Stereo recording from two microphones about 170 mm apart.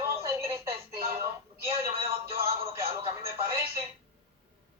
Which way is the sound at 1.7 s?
35° right (ahead or behind).